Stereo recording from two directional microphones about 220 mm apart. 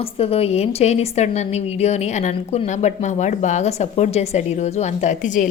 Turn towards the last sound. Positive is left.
turn(degrees=35)  # may be behind; listen again after turning